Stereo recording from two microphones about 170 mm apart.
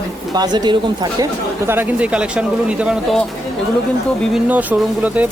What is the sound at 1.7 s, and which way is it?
Speech, 10° right (ahead or behind).